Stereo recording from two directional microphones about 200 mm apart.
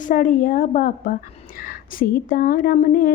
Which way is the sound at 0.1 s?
40° left (ahead or behind).